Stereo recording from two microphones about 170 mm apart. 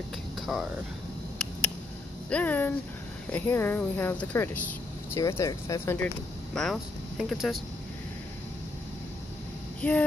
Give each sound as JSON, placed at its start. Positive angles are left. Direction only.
{"t": 0.4, "sound": "a sound", "side_deg": 0}
{"t": 2.2, "sound": "speech", "side_deg": 10}
{"t": 6.5, "sound": "speech", "side_deg": 0}
{"t": 9.8, "sound": "speech", "side_deg": 10}